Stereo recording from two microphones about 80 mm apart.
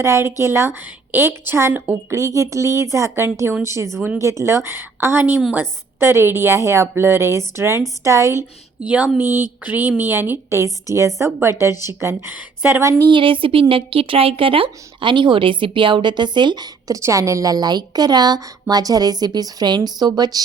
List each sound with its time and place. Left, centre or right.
0.0 s a woman's voice: right
9.1 s a woman's voice: right
13.0 s a woman's voice: right
17.0 s a woman's voice: right